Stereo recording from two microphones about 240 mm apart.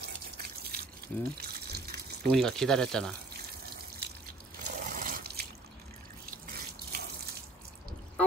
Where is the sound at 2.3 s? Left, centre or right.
Centre.